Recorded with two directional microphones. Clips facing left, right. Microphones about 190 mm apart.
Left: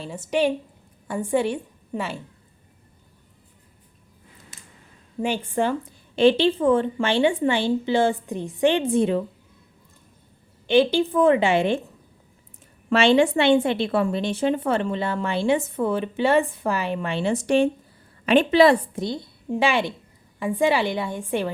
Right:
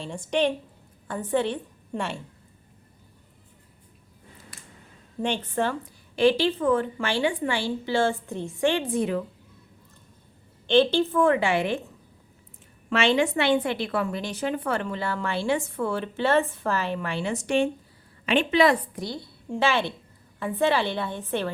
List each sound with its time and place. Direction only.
0.0 s a woman's voice: 5° left (ahead or behind)
5.2 s a woman's voice: 10° left (ahead or behind)
6.1 s a woman's voice: 25° left (ahead or behind)
10.7 s a woman's voice: 10° left (ahead or behind); by 11.8 s 25° left (ahead or behind)
12.9 s a woman's voice: 30° left (ahead or behind); by 21.5 s 10° left (ahead or behind)